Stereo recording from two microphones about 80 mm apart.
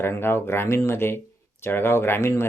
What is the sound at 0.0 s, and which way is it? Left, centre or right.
Speech, left.